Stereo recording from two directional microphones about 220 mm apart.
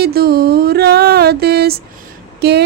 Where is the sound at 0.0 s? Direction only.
45° right (ahead or behind).